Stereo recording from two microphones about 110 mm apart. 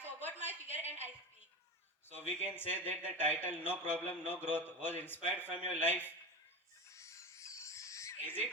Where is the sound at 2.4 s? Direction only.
20° left (ahead or behind).